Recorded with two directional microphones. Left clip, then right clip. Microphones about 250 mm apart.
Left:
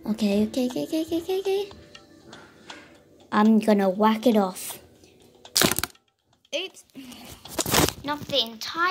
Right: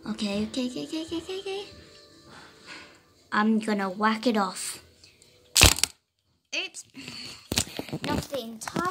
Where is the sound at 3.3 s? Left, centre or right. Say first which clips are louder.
Left 5 dB; left.